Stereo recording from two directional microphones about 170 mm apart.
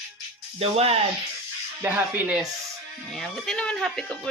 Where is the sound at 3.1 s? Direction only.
Centre (ahead or behind).